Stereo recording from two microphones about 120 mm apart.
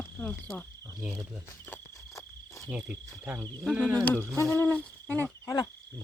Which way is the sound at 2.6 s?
10° right (ahead or behind).